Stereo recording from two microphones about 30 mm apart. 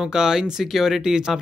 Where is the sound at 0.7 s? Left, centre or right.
Centre.